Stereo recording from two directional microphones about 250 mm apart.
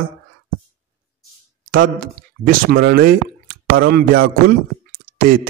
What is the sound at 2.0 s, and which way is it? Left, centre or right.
Speech, right.